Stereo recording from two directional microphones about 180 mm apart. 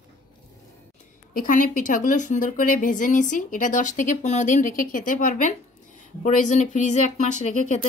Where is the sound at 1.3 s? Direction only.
50° left (ahead or behind).